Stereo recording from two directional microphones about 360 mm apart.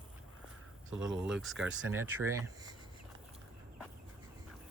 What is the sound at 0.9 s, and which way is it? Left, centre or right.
Speech, right.